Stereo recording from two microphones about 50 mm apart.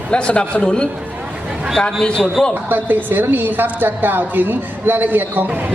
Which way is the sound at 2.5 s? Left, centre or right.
Right.